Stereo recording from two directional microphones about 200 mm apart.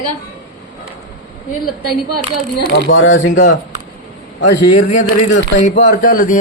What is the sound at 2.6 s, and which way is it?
Speech, 65° left (ahead or behind).